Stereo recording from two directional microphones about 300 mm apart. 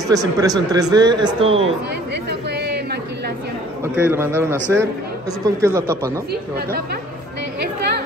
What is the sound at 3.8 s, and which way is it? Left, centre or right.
Speech, centre.